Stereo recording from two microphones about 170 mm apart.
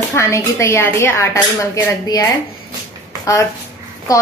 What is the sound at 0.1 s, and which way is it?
A woman's voice, 15° left (ahead or behind).